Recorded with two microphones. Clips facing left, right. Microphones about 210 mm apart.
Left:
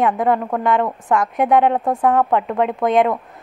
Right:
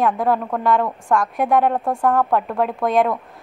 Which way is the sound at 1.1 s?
20° left (ahead or behind).